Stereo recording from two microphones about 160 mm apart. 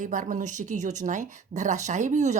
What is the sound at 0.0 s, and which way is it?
A woman's voice, 55° right (ahead or behind).